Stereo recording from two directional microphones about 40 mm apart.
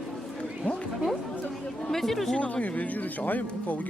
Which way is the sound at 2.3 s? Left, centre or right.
Left.